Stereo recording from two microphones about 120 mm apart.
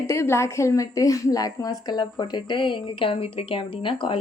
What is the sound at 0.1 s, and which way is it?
A woman's voice, 20° left (ahead or behind).